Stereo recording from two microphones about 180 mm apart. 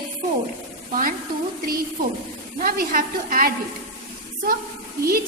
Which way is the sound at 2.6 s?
50° right (ahead or behind).